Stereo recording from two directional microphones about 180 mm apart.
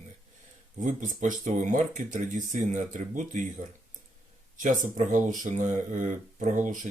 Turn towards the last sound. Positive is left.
turn(degrees=-45)  # may be behind; listen again after turning